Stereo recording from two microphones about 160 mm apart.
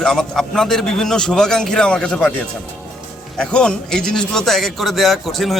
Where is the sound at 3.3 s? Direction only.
5° left (ahead or behind).